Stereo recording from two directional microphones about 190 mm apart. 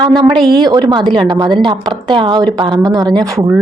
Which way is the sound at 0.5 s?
20° right (ahead or behind).